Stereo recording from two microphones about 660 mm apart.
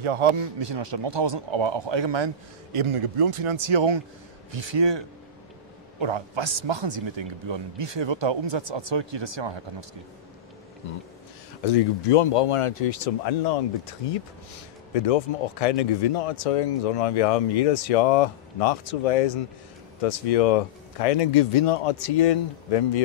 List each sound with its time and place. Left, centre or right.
0.0 s speech: right
11.6 s speech: left
14.0 s speech: left